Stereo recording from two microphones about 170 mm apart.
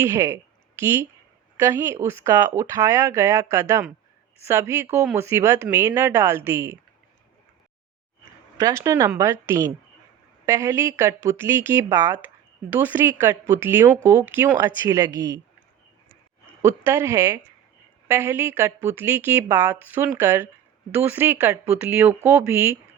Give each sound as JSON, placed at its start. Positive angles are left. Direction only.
{"t": 0.0, "sound": "a woman's voice", "side_deg": -15}
{"t": 8.5, "sound": "a woman's voice", "side_deg": -20}
{"t": 16.6, "sound": "a woman's voice", "side_deg": -15}